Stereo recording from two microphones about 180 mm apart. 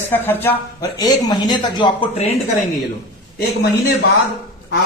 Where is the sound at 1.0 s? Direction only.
20° left (ahead or behind).